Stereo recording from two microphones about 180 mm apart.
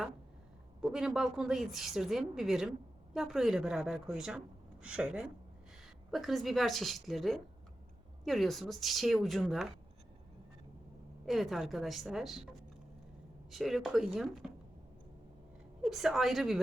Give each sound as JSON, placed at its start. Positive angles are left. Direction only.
{"t": 0.8, "sound": "a woman's voice", "side_deg": -5}
{"t": 11.3, "sound": "a woman's voice", "side_deg": 0}
{"t": 13.5, "sound": "a woman's voice", "side_deg": 0}
{"t": 15.8, "sound": "a woman's voice", "side_deg": 0}